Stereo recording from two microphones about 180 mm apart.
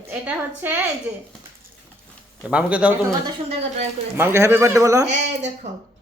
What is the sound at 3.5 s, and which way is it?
Speech, 35° right (ahead or behind).